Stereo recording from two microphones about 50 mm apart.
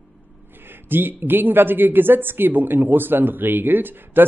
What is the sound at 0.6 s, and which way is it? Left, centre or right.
Speech, right.